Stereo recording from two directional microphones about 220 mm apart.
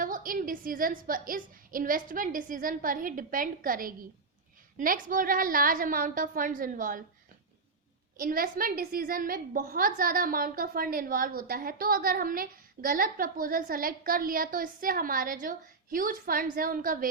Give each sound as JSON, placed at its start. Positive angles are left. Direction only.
{"t": 0.0, "sound": "a woman's voice", "side_deg": -40}
{"t": 8.2, "sound": "a woman's voice", "side_deg": -40}